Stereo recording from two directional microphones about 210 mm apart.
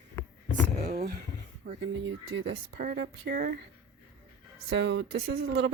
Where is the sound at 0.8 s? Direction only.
30° right (ahead or behind).